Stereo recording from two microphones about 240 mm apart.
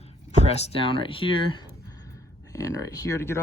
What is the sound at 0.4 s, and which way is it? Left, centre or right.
Speech, left.